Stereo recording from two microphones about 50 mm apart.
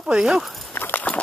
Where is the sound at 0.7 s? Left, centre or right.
Left.